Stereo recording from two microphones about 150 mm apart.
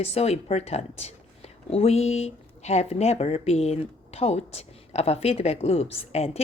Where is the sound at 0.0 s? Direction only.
45° left (ahead or behind).